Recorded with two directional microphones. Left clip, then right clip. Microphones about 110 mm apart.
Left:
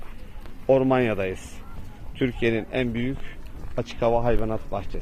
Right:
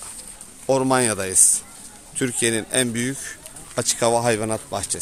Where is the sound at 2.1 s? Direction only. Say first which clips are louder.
Right 2 dB; 55° right (ahead or behind).